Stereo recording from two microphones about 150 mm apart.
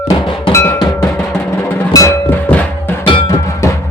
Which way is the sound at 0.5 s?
20° left (ahead or behind).